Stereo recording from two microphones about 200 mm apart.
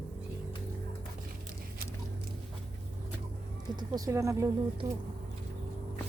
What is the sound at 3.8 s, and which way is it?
Speech, 20° right (ahead or behind).